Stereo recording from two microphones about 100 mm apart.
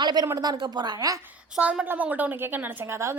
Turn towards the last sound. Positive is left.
turn(degrees=-25)  # may be behind; listen again after turning